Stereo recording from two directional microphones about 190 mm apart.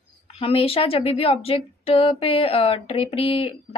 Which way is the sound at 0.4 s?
30° left (ahead or behind).